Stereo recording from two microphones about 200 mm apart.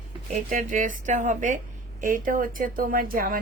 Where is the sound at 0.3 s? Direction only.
40° right (ahead or behind).